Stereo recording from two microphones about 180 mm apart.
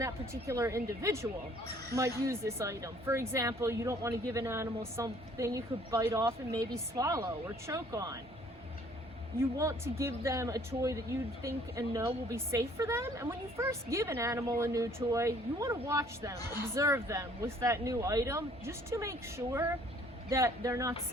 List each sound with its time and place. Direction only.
0.0 s a woman's voice: 15° right (ahead or behind)
9.6 s a woman's voice: 15° right (ahead or behind)